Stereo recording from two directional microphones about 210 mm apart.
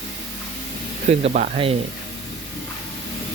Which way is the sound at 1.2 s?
30° right (ahead or behind).